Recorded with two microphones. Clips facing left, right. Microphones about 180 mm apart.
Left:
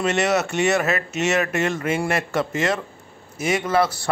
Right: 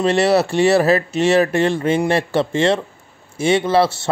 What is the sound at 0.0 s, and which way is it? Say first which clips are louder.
Speech: right 6 dB; 35° right (ahead or behind).